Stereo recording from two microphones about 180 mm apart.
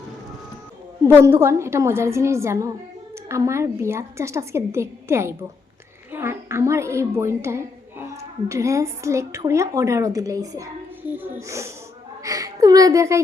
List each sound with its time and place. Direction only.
1.0 s a woman's voice: 15° right (ahead or behind)